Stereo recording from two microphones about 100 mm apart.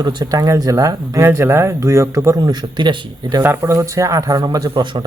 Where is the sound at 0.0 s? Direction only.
40° right (ahead or behind).